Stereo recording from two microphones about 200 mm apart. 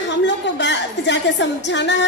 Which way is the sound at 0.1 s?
60° left (ahead or behind).